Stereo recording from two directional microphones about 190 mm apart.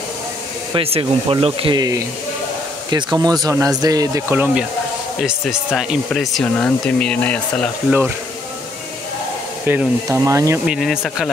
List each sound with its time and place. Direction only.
0.7 s speech: 30° right (ahead or behind); by 4.6 s 10° right (ahead or behind)
5.7 s speech: centre (ahead or behind)
9.7 s speech: 10° right (ahead or behind)
10.6 s speech: centre (ahead or behind)